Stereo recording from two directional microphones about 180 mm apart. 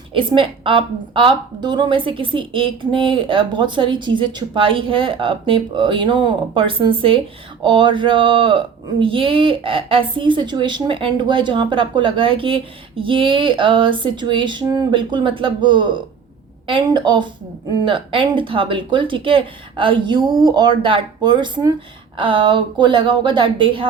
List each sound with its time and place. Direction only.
0.1 s speech: 30° right (ahead or behind)